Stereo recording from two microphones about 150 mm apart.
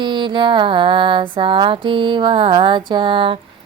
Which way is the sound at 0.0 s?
30° right (ahead or behind).